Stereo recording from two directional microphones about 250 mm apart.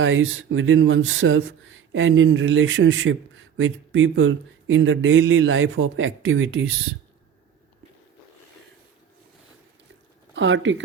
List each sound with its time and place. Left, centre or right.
0.0 s speech: right
10.3 s speech: right